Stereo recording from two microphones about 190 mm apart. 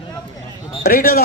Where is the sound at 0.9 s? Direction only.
50° left (ahead or behind).